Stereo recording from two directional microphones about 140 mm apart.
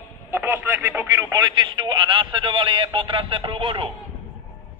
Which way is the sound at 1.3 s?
30° right (ahead or behind).